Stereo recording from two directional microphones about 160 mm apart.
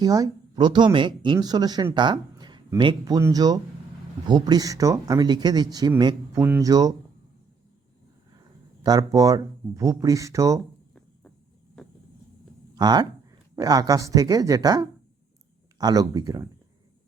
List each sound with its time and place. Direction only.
0.0 s speech: 25° right (ahead or behind)
8.8 s speech: 25° right (ahead or behind)
12.7 s speech: 25° right (ahead or behind)